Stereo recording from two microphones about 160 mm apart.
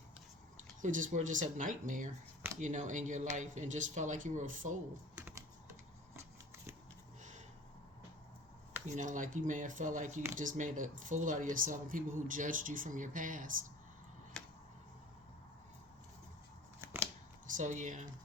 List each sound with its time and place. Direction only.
0.8 s speech: 55° right (ahead or behind)
5.1 s typing: 10° right (ahead or behind)
8.9 s speech: 50° right (ahead or behind)
14.3 s a sound: 5° left (ahead or behind)
17.4 s speech: 50° right (ahead or behind)